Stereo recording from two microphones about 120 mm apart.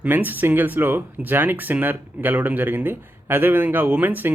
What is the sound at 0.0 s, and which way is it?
Speech, 15° right (ahead or behind).